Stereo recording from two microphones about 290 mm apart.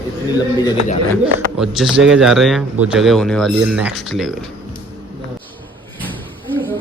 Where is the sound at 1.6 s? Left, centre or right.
Centre.